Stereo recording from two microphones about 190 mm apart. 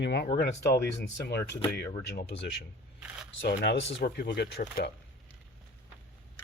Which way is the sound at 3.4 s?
60° left (ahead or behind).